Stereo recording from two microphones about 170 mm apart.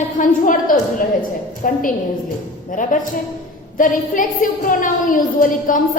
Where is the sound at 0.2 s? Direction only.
50° left (ahead or behind).